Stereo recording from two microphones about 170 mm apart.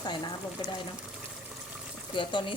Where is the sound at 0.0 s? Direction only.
25° left (ahead or behind).